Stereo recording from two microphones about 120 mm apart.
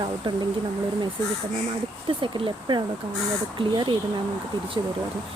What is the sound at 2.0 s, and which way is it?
Speech, 45° right (ahead or behind).